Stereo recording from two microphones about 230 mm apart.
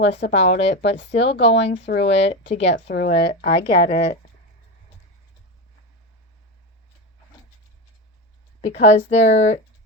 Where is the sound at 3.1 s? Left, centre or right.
Left.